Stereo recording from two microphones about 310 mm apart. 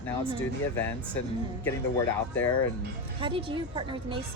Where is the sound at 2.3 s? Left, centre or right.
Centre.